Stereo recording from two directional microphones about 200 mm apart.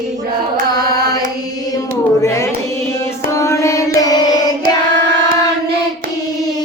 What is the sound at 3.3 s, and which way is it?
Music, 15° left (ahead or behind).